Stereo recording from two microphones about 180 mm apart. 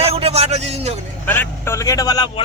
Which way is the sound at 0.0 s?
35° right (ahead or behind).